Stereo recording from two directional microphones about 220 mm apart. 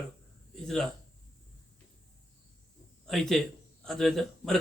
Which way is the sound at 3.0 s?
Centre (ahead or behind).